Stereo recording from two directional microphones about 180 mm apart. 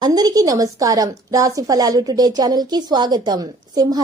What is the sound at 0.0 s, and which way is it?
A woman's voice, 20° right (ahead or behind).